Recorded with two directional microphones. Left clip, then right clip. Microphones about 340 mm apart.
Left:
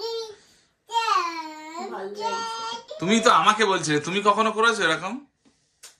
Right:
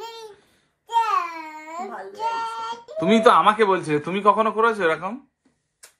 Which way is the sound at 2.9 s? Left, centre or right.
Centre.